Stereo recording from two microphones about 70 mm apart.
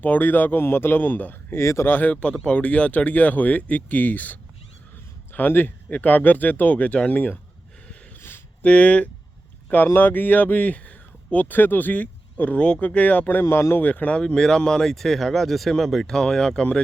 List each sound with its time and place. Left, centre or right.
0.0 s speech: left
1.5 s speech: left
1.9 s speech: left
2.2 s speech: centre
8.6 s speech: centre
13.4 s a man's voice: left
13.8 s speech: left
14.2 s speech: centre